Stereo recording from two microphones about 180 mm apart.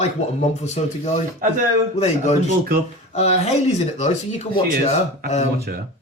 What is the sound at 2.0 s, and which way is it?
Speech, 40° left (ahead or behind).